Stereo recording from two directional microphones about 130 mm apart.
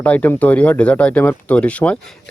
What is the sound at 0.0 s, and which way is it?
Speech, 10° left (ahead or behind).